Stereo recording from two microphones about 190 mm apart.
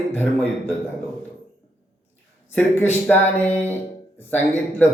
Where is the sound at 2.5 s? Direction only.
10° left (ahead or behind).